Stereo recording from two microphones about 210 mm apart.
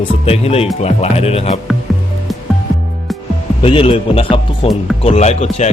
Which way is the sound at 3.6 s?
25° left (ahead or behind).